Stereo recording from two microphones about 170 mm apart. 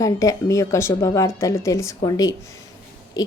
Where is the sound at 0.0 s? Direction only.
20° left (ahead or behind).